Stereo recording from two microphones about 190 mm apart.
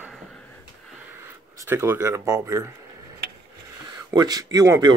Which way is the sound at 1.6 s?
10° right (ahead or behind).